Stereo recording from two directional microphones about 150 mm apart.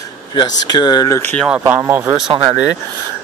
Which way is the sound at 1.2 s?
10° left (ahead or behind).